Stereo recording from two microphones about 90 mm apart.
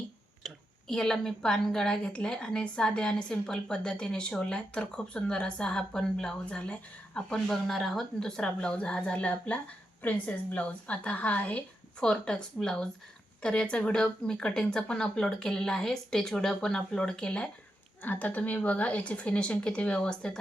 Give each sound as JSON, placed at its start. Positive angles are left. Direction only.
{"t": 0.4, "sound": "a woman's voice", "side_deg": 5}